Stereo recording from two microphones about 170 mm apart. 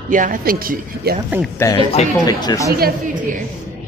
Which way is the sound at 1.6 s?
20° left (ahead or behind).